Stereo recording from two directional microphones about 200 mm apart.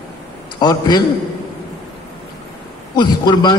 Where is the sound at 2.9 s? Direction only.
20° left (ahead or behind).